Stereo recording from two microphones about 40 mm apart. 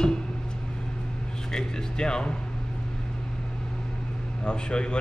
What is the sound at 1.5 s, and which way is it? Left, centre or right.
Speech, left.